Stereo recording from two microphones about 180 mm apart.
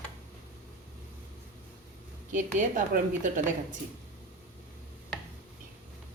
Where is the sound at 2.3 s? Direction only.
45° right (ahead or behind).